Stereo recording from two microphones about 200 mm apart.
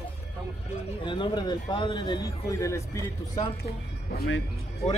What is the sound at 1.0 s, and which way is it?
A man's voice, 25° left (ahead or behind).